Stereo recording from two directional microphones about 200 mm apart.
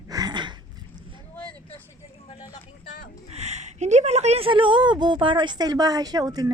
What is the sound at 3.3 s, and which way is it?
A woman's voice, 35° right (ahead or behind).